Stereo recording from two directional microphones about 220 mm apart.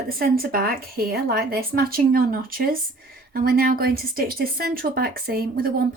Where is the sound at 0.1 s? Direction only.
40° right (ahead or behind).